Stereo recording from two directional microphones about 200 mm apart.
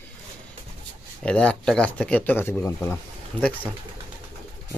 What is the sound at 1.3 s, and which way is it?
Speech, 5° left (ahead or behind).